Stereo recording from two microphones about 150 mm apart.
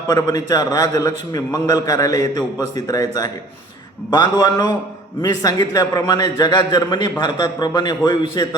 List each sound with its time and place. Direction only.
0.1 s a man's voice: 25° left (ahead or behind)